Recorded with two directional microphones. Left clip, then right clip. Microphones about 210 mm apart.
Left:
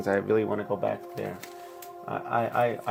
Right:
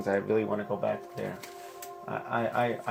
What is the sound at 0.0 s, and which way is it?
Speech, 20° left (ahead or behind).